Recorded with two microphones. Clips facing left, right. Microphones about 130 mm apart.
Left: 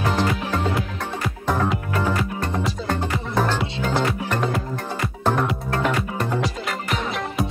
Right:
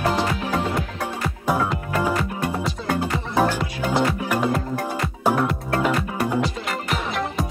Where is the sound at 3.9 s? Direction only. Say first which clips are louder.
Right 2 dB; 10° right (ahead or behind).